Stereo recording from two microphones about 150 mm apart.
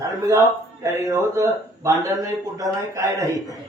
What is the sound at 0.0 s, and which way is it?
Speech, 20° right (ahead or behind).